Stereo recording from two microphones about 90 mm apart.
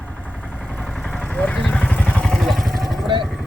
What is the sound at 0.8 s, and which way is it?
Vehicle, 5° left (ahead or behind).